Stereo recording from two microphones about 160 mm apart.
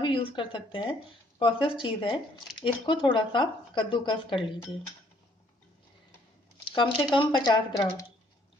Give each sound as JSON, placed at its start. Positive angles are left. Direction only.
{"t": 0.0, "sound": "speech", "side_deg": 35}
{"t": 6.6, "sound": "speech", "side_deg": 30}